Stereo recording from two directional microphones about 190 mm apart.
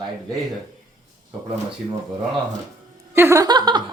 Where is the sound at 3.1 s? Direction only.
15° right (ahead or behind).